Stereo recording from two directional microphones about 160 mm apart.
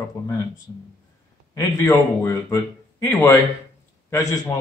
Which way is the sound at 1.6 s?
15° left (ahead or behind).